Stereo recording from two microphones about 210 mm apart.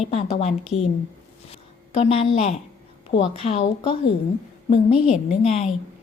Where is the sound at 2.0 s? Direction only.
25° left (ahead or behind).